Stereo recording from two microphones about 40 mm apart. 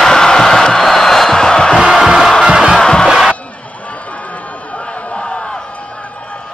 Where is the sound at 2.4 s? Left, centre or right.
Right.